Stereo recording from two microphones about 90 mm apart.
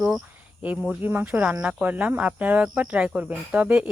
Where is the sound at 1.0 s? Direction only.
20° right (ahead or behind).